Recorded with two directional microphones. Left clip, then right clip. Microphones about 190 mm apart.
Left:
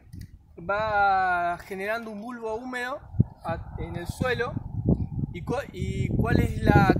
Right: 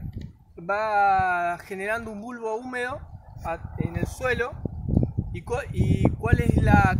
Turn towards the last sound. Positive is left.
turn(degrees=15)  # may be behind; listen again after turning